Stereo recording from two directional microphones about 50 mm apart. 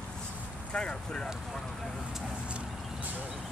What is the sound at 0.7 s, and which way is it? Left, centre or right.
Speech, centre.